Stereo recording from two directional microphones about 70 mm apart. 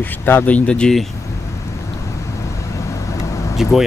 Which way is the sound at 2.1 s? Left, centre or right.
Left.